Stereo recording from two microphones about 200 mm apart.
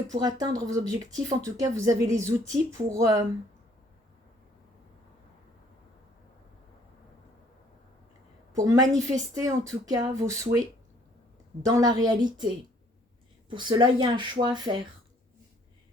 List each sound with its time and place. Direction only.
0.1 s speech: 20° right (ahead or behind)
8.5 s speech: 20° right (ahead or behind)
11.6 s speech: 20° right (ahead or behind)
13.5 s speech: 25° right (ahead or behind)